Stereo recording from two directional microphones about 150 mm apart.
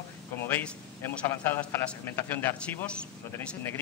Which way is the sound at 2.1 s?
10° left (ahead or behind).